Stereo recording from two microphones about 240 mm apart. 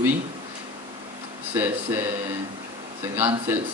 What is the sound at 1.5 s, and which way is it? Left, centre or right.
Speech, centre.